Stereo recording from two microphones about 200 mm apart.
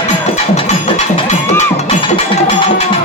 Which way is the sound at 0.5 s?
30° left (ahead or behind).